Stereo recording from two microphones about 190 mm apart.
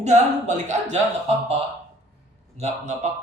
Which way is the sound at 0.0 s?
40° right (ahead or behind).